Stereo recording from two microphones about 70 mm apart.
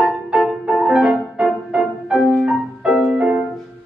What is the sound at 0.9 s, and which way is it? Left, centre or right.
Music, centre.